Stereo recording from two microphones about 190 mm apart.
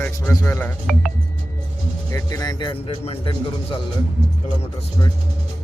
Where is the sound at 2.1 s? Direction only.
20° left (ahead or behind).